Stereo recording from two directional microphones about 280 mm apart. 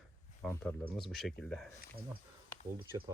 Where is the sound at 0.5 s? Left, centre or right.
Centre.